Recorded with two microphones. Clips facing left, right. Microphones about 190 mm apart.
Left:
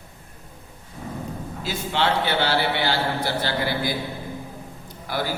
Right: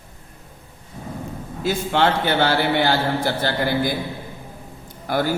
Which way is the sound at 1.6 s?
50° right (ahead or behind).